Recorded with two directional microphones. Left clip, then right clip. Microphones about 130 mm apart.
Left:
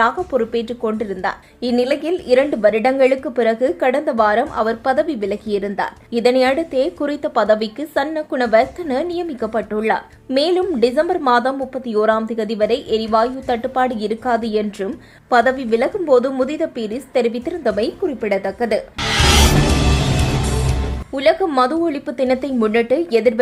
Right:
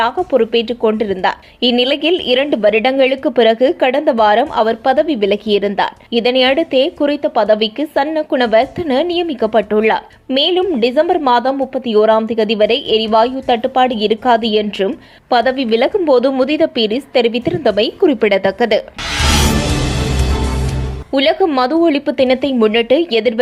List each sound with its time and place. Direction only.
0.0 s speech: 25° right (ahead or behind)
10.3 s a woman's voice: 15° right (ahead or behind)
19.0 s music: centre (ahead or behind)
21.1 s speech: 20° right (ahead or behind)